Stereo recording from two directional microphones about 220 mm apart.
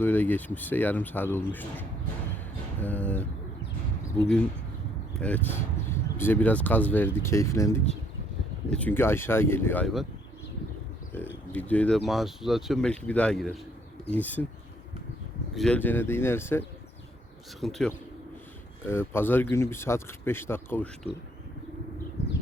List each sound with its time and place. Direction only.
0.0 s speech: 10° left (ahead or behind)
2.8 s speech: 5° left (ahead or behind)
5.2 s speech: 10° left (ahead or behind)
11.1 s a sound: 5° left (ahead or behind)
11.5 s speech: 5° left (ahead or behind)
15.5 s speech: 5° left (ahead or behind)